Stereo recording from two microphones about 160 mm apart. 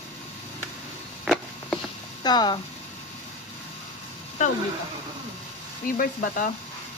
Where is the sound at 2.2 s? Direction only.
25° left (ahead or behind).